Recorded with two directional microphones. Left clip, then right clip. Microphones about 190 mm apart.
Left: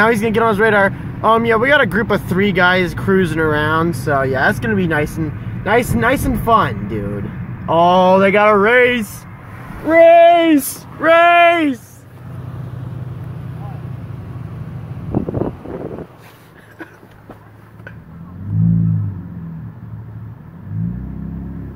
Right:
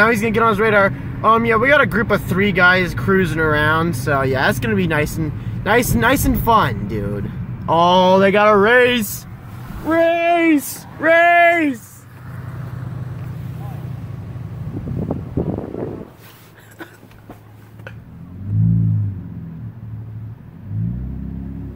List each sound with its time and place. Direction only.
0.0 s speech: 10° left (ahead or behind); by 9.0 s 5° right (ahead or behind)
9.8 s speech: 40° left (ahead or behind)
11.0 s speech: 15° left (ahead or behind)